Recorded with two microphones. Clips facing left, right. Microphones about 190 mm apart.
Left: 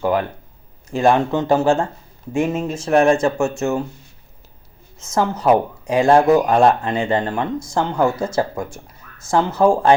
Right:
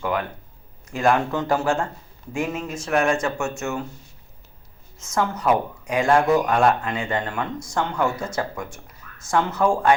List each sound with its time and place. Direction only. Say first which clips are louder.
0.0 s speech: left 6 dB; 35° left (ahead or behind)
5.1 s speech: left 5 dB; 30° left (ahead or behind)